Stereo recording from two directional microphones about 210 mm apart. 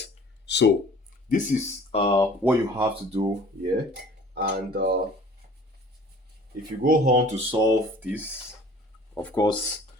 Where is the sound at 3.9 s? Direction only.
50° right (ahead or behind).